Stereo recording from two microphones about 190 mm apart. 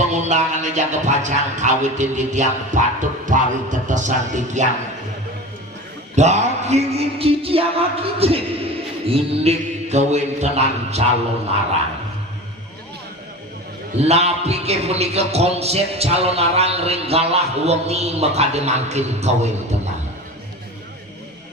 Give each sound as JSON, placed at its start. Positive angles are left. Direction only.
{"t": 0.0, "sound": "a man's voice", "side_deg": -40}
{"t": 6.1, "sound": "a man's voice", "side_deg": -35}
{"t": 14.0, "sound": "a man's voice", "side_deg": -35}